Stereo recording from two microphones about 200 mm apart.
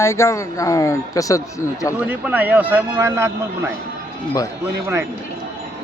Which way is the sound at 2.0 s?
10° right (ahead or behind).